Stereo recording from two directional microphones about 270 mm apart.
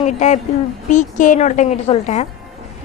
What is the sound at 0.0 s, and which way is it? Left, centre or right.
A woman's voice, left.